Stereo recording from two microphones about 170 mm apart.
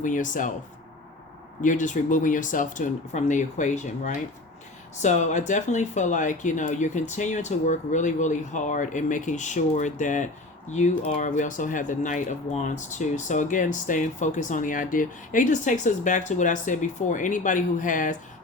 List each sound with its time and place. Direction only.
0.0 s speech: 50° left (ahead or behind)
1.6 s speech: 45° left (ahead or behind)